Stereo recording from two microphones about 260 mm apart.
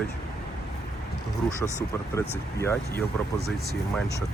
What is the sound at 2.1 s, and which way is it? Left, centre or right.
Speech, centre.